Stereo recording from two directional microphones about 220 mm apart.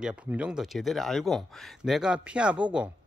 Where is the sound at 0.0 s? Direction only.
5° right (ahead or behind).